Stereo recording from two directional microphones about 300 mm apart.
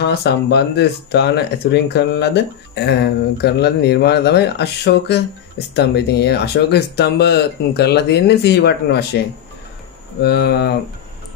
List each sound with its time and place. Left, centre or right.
0.0 s speech: left
10.2 s speech: left